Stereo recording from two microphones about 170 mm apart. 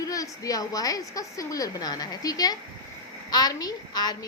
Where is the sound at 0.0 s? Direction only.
20° left (ahead or behind).